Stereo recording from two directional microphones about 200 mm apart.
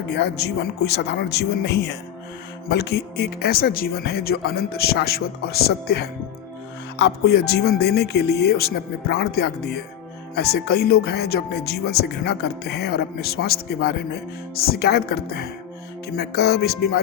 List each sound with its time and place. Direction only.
0.1 s speech: 60° left (ahead or behind)